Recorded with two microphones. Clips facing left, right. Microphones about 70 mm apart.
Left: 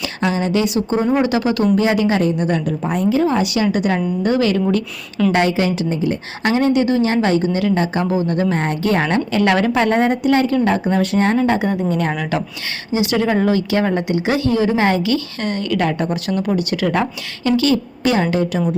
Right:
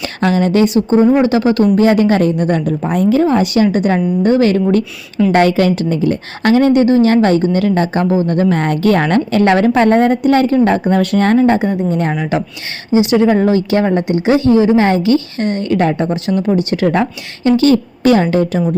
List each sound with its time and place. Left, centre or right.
0.2 s a woman's voice: right
0.7 s a woman's voice: right
1.7 s a woman's voice: right
5.3 s a woman's voice: right
8.5 s a woman's voice: right
11.7 s a woman's voice: right